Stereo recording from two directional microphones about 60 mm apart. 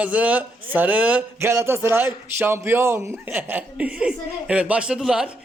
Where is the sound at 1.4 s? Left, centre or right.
Right.